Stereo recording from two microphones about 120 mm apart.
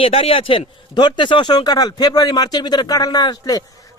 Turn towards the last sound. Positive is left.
turn(degrees=35)  # may be behind; listen again after turning